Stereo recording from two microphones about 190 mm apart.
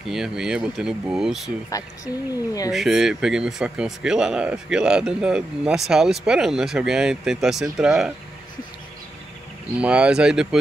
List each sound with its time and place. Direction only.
0.1 s speech: 5° right (ahead or behind)
1.7 s speech: 15° left (ahead or behind)
2.7 s speech: centre (ahead or behind)
9.8 s speech: 5° right (ahead or behind)